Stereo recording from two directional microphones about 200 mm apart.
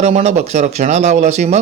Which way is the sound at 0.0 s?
35° right (ahead or behind).